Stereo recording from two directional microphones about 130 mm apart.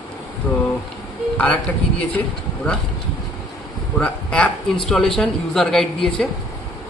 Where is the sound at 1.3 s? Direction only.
10° left (ahead or behind).